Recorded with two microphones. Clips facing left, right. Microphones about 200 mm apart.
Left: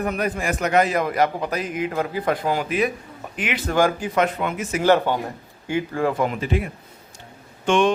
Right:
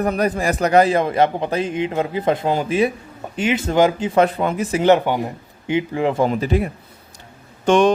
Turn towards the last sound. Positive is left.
turn(degrees=-40)  # may be behind; listen again after turning